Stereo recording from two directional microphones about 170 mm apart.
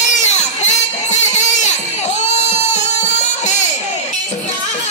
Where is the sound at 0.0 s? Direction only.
45° left (ahead or behind).